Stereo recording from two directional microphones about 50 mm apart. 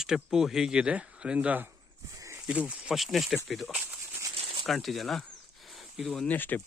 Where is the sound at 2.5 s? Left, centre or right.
Right.